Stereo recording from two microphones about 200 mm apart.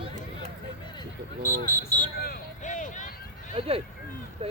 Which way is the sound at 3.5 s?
30° right (ahead or behind).